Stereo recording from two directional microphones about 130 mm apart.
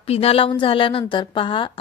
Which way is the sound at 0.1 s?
50° left (ahead or behind).